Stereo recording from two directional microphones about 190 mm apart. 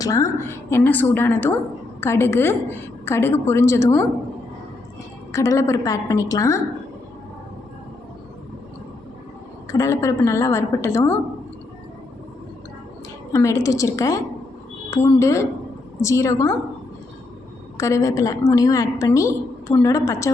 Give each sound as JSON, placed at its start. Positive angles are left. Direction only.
{"t": 0.0, "sound": "a woman's voice", "side_deg": 15}
{"t": 5.3, "sound": "a woman's voice", "side_deg": 15}
{"t": 9.7, "sound": "a woman's voice", "side_deg": 15}
{"t": 13.3, "sound": "a woman's voice", "side_deg": 15}
{"t": 17.7, "sound": "a woman's voice", "side_deg": 15}